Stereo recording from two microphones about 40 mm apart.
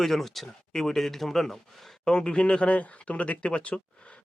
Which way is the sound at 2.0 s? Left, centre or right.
Centre.